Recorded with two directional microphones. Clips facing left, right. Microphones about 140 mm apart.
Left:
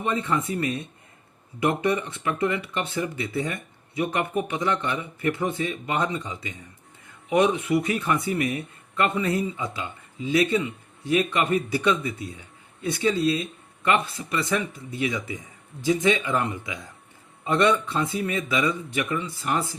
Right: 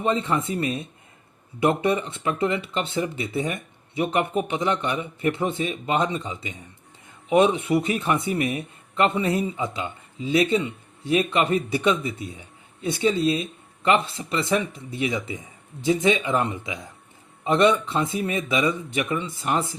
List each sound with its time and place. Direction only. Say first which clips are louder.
0.0 s speech: right 2 dB; 25° right (ahead or behind)